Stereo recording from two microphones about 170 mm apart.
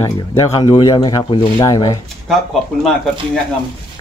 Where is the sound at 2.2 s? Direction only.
Centre (ahead or behind).